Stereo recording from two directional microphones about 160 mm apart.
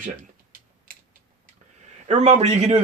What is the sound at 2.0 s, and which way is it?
Speech, 45° right (ahead or behind).